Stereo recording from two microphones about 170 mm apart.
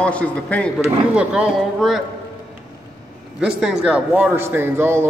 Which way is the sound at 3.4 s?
5° right (ahead or behind).